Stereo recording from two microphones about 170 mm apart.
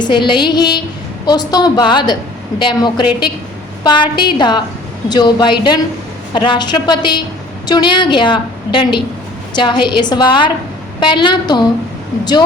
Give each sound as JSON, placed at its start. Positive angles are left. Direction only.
{"t": 0.0, "sound": "a woman's voice", "side_deg": 25}